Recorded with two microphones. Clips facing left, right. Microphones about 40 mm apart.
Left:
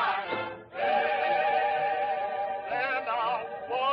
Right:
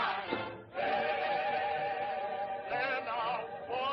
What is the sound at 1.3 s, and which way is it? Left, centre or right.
Music, left.